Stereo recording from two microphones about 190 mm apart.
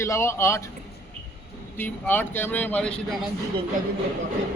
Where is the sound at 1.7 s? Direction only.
10° left (ahead or behind).